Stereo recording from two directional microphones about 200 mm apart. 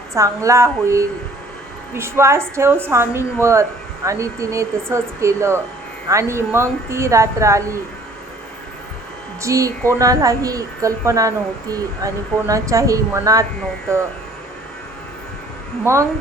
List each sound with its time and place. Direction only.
0.1 s a woman's voice: 15° right (ahead or behind)
9.4 s a woman's voice: 15° right (ahead or behind)
15.8 s a woman's voice: 15° right (ahead or behind)